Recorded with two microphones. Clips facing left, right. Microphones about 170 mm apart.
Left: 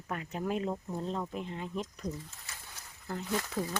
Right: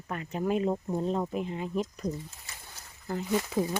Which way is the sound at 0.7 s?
25° right (ahead or behind).